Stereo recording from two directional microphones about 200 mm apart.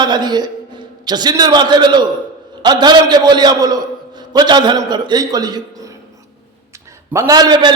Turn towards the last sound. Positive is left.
turn(degrees=-20)  # may be behind; listen again after turning